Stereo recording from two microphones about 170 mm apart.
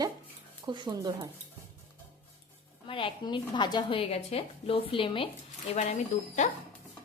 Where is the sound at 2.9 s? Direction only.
30° left (ahead or behind).